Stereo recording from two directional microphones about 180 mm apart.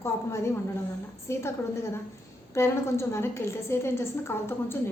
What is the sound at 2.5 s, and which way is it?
A woman's voice, 15° left (ahead or behind).